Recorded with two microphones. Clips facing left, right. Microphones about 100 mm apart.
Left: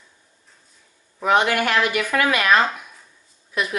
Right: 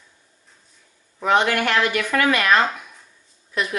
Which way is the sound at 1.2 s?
10° left (ahead or behind).